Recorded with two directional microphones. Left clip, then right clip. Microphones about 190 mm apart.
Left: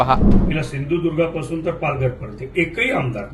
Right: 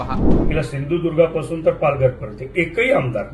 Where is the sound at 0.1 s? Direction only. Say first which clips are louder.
Left 6 dB; 45° left (ahead or behind).